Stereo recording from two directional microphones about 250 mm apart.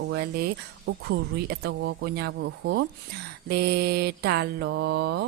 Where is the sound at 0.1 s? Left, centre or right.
Right.